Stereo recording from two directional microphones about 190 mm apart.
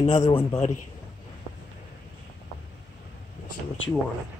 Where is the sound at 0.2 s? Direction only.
20° left (ahead or behind).